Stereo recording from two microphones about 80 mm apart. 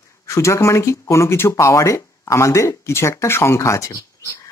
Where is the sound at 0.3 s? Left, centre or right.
Left.